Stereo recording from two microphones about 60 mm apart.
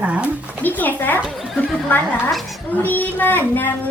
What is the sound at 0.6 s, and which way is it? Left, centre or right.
Speech, left.